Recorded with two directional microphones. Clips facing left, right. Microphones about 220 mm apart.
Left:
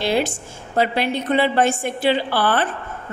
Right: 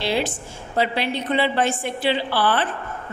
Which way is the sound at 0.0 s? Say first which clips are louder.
Left 3 dB; 45° left (ahead or behind).